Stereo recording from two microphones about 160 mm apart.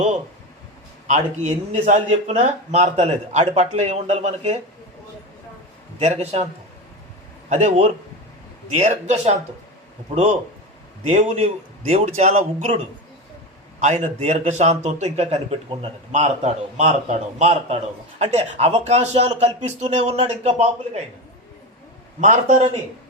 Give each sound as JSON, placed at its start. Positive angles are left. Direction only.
{"t": 1.0, "sound": "speech", "side_deg": -45}
{"t": 6.0, "sound": "a man's voice", "side_deg": -40}
{"t": 7.5, "sound": "speech", "side_deg": -45}
{"t": 11.0, "sound": "speech", "side_deg": -45}
{"t": 22.2, "sound": "speech", "side_deg": -50}